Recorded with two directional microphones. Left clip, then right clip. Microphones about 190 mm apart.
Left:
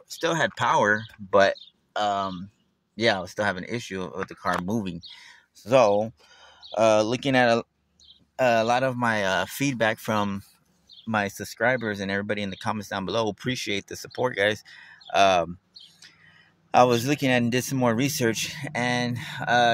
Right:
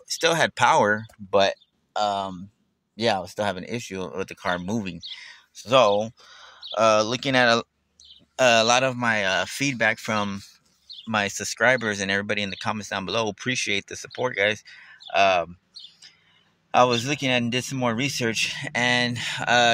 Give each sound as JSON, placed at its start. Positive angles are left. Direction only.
{"t": 0.2, "sound": "speech", "side_deg": -10}
{"t": 4.6, "sound": "speech", "side_deg": 5}
{"t": 16.7, "sound": "speech", "side_deg": 20}